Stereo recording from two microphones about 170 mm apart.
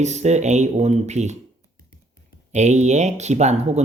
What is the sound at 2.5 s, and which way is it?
Speech, 45° right (ahead or behind).